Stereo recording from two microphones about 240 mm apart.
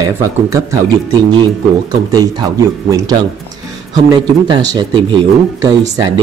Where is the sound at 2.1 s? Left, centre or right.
Centre.